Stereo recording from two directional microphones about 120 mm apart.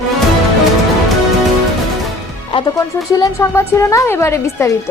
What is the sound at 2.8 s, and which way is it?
Speech, 30° left (ahead or behind).